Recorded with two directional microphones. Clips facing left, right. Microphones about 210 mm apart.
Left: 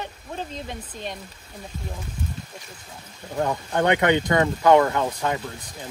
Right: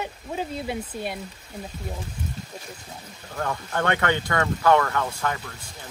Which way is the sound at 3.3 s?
20° left (ahead or behind).